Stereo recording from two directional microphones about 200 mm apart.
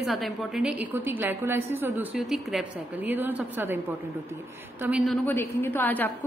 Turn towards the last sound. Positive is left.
turn(degrees=10)  # may be behind; listen again after turning